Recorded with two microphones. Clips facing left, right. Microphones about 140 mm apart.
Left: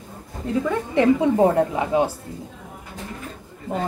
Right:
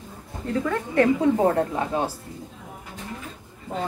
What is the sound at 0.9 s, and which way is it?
A woman's voice, 15° left (ahead or behind).